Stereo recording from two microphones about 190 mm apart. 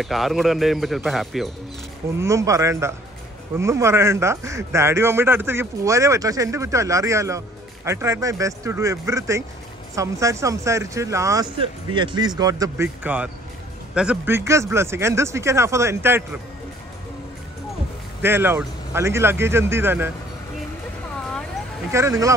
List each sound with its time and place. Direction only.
0.0 s speech: centre (ahead or behind)
2.1 s speech: 15° right (ahead or behind)
18.2 s speech: 10° right (ahead or behind)
21.9 s speech: 15° right (ahead or behind)